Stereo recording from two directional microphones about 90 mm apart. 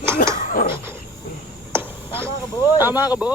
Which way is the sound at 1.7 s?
25° right (ahead or behind).